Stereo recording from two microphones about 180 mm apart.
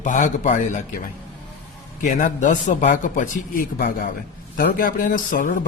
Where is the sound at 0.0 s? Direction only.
45° left (ahead or behind).